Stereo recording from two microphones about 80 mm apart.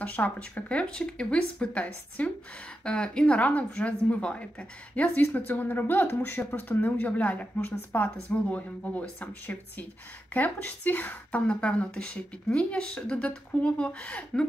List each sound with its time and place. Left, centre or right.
0.0 s speech: centre